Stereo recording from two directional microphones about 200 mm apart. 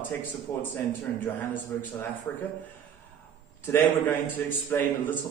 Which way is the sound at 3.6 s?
10° left (ahead or behind).